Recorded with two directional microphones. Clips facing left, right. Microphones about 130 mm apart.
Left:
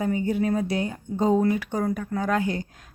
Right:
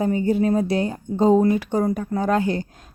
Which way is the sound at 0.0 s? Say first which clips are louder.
Right 4 dB; 35° right (ahead or behind).